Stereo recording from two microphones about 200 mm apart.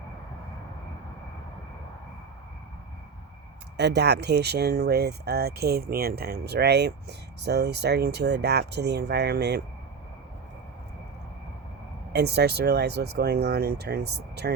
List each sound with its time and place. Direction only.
3.8 s speech: 60° right (ahead or behind)
12.1 s speech: 55° right (ahead or behind)